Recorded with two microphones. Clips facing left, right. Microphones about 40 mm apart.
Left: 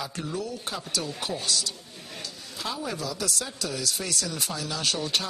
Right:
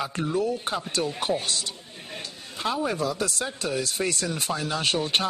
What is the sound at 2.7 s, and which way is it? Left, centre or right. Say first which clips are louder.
Speech: right 6 dB; right.